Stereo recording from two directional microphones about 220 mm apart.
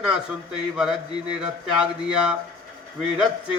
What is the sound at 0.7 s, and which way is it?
Speech, 5° right (ahead or behind).